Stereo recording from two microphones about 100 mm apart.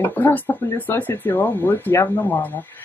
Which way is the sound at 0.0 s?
20° left (ahead or behind).